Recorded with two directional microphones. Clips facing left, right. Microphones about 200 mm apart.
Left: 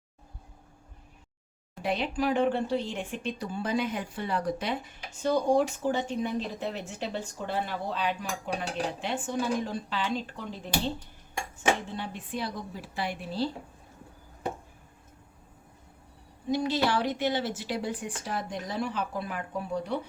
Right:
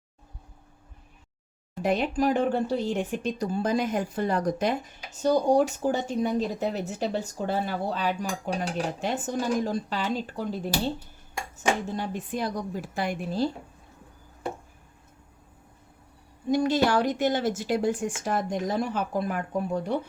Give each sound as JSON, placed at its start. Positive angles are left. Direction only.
{"t": 1.8, "sound": "speech", "side_deg": -45}
{"t": 16.5, "sound": "speech", "side_deg": -50}